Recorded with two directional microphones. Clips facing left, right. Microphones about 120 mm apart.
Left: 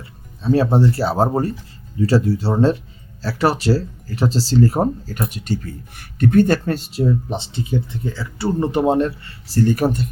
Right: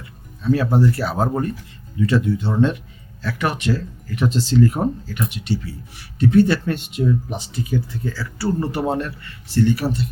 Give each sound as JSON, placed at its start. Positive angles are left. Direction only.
{"t": 0.0, "sound": "speech", "side_deg": 30}